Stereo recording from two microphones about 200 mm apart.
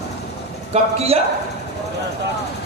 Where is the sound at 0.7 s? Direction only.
30° right (ahead or behind).